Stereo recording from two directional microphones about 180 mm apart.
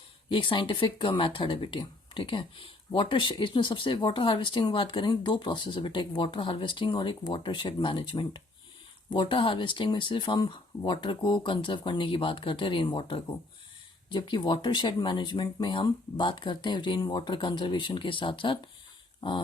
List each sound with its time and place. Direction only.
0.3 s speech: 30° left (ahead or behind)